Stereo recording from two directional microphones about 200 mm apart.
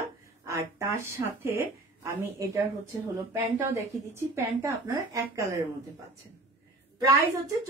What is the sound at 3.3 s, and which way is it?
A woman's voice, 15° right (ahead or behind).